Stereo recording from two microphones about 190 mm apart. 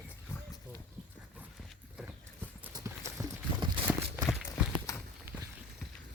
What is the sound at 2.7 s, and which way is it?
Clip-clop, 15° right (ahead or behind).